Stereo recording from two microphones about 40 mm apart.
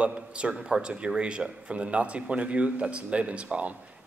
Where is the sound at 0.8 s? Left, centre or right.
Right.